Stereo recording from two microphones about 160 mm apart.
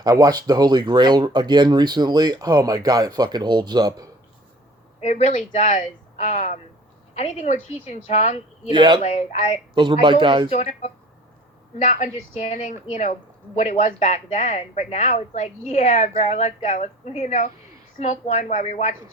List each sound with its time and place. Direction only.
0.0 s speech: 25° right (ahead or behind)
5.0 s speech: 45° left (ahead or behind)
8.7 s speech: 30° right (ahead or behind)
9.0 s speech: 45° left (ahead or behind)
9.7 s speech: 30° right (ahead or behind)
10.5 s speech: 40° left (ahead or behind)